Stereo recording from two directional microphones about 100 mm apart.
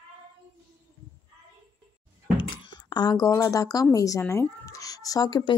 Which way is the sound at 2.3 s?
50° left (ahead or behind).